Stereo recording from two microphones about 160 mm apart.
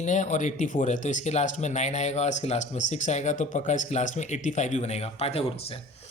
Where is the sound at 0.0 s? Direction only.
50° left (ahead or behind).